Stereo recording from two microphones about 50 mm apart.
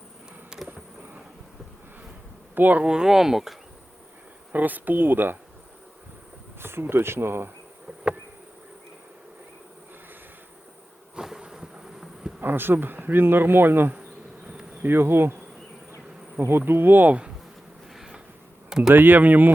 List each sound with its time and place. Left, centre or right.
2.6 s speech: right
2.8 s speech: centre
4.5 s speech: right
6.6 s speech: right
11.1 s insect: centre
12.4 s speech: right
14.4 s bee: centre
14.8 s speech: right
16.4 s speech: right
17.1 s speech: right
17.9 s a sound: centre
18.9 s speech: right